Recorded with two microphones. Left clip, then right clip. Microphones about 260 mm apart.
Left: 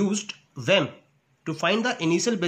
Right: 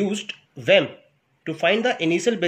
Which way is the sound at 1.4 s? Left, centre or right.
Left.